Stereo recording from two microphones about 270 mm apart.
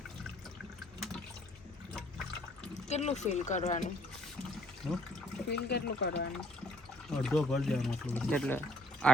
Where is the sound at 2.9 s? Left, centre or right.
Left.